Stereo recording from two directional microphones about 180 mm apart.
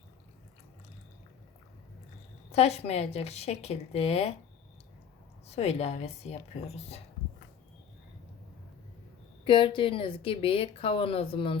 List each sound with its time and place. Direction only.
2.5 s speech: 35° left (ahead or behind)
5.5 s speech: 35° left (ahead or behind)
9.4 s speech: 30° left (ahead or behind)